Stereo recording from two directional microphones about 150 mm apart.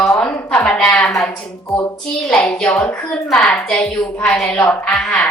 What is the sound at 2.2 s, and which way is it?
A woman's voice, 5° left (ahead or behind).